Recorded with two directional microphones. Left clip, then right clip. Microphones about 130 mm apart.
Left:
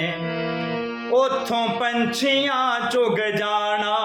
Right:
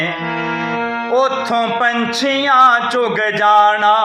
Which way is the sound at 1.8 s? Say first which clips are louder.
Right 6 dB; 15° left (ahead or behind).